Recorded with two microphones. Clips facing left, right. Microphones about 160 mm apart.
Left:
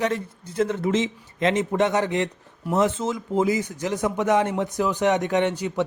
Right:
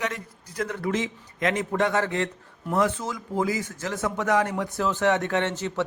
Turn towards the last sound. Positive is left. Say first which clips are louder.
# left 4 dB
turn(degrees=15)  # may be behind; listen again after turning